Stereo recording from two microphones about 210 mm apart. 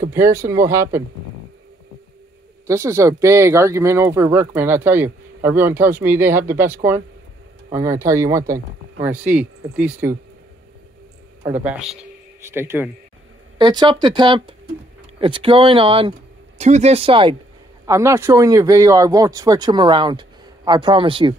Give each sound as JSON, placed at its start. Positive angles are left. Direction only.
{"t": 0.1, "sound": "speech", "side_deg": -10}
{"t": 2.6, "sound": "speech", "side_deg": -15}
{"t": 11.6, "sound": "a man's voice", "side_deg": -5}
{"t": 13.6, "sound": "speech", "side_deg": -20}
{"t": 17.8, "sound": "speech", "side_deg": -15}